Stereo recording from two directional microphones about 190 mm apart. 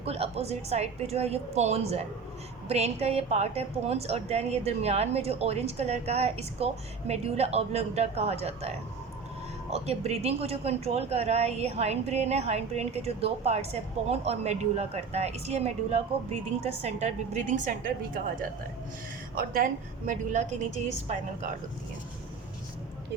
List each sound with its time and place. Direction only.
0.0 s a woman's voice: 30° right (ahead or behind)
9.6 s a woman's voice: 35° right (ahead or behind)
20.1 s a woman's voice: 40° right (ahead or behind)